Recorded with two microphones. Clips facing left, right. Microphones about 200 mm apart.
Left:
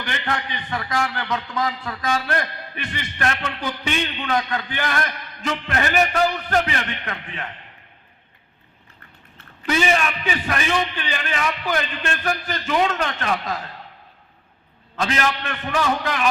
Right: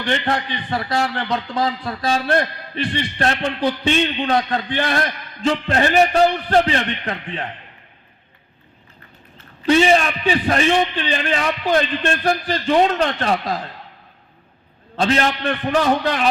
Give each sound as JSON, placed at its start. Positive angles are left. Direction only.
{"t": 0.0, "sound": "a man's voice", "side_deg": -30}
{"t": 9.6, "sound": "a man's voice", "side_deg": -30}
{"t": 14.9, "sound": "a man's voice", "side_deg": -30}